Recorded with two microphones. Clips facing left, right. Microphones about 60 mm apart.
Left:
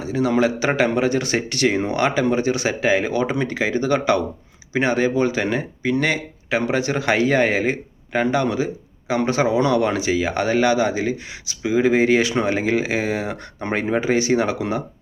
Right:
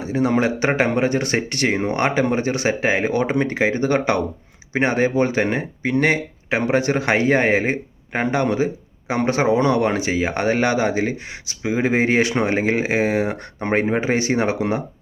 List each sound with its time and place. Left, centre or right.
0.0 s speech: right